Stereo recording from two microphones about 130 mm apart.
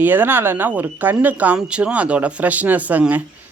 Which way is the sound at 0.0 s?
15° right (ahead or behind).